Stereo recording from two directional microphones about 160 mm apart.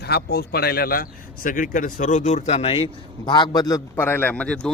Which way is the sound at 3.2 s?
30° left (ahead or behind).